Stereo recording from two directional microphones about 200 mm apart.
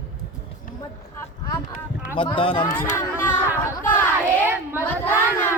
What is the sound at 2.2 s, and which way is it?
Speech, 25° left (ahead or behind).